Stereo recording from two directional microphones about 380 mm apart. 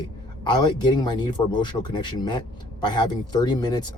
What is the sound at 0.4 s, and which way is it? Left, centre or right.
Speech, centre.